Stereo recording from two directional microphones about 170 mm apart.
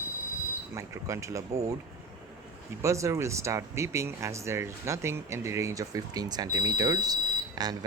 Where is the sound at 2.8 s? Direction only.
15° right (ahead or behind).